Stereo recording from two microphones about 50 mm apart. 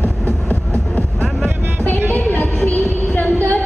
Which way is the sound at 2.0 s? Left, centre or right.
Left.